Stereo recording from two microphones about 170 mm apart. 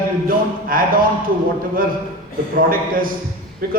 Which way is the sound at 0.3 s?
55° right (ahead or behind).